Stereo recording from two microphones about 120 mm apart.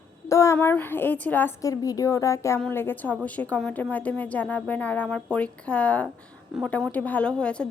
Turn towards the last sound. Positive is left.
turn(degrees=10)  # may be behind; listen again after turning